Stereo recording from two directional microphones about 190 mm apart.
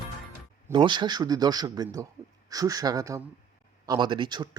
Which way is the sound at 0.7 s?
25° right (ahead or behind).